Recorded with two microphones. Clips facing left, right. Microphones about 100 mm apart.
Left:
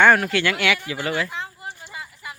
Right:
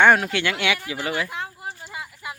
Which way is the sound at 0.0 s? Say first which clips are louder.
Left 1 dB; 20° right (ahead or behind).